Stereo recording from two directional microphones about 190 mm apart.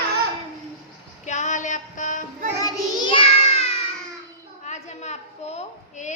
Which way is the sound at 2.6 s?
20° left (ahead or behind).